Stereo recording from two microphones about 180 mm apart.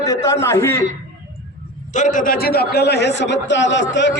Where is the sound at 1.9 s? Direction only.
45° left (ahead or behind).